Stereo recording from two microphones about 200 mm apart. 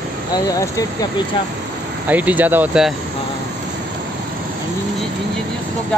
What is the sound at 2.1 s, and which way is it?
Speech, 10° right (ahead or behind).